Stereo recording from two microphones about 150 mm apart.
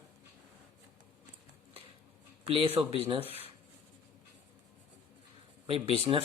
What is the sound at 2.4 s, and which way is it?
Speech, 40° right (ahead or behind).